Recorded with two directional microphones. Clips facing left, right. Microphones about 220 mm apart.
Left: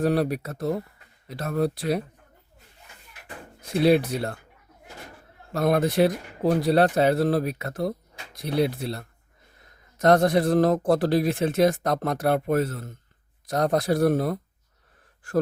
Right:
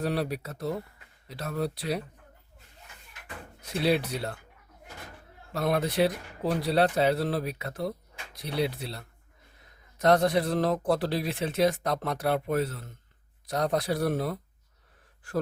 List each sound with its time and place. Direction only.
0.0 s speech: 50° left (ahead or behind)
3.8 s speech: 50° left (ahead or behind)
5.5 s speech: 45° left (ahead or behind)